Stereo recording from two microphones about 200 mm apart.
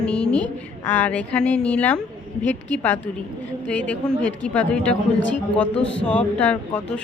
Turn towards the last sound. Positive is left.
turn(degrees=5)  # may be behind; listen again after turning